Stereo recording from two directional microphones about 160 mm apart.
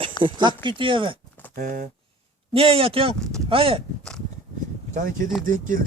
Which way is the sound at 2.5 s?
35° right (ahead or behind).